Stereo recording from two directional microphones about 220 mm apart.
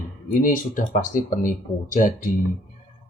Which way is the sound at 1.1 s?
40° left (ahead or behind).